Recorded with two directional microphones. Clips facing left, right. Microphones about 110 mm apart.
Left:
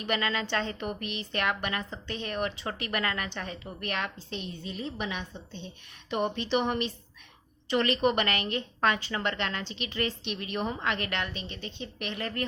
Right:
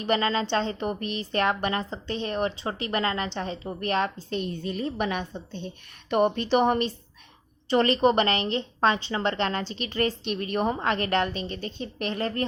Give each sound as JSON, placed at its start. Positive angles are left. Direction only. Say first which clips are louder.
{"t": 0.0, "sound": "a woman's voice", "louder": "right 5 dB", "side_deg": -30}
{"t": 4.3, "sound": "a woman's voice", "louder": "right 8 dB", "side_deg": -50}